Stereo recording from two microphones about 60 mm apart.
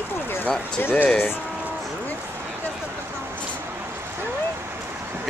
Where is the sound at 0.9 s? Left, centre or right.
Left.